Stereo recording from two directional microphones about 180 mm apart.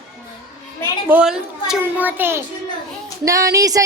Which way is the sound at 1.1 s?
5° right (ahead or behind).